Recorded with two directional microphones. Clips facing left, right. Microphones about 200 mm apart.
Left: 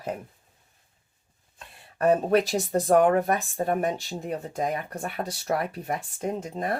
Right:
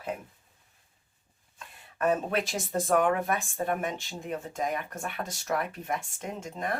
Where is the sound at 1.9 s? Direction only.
40° left (ahead or behind).